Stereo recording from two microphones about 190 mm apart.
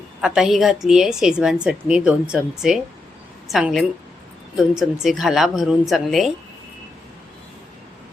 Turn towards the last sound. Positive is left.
turn(degrees=0)  # may be behind; listen again after turning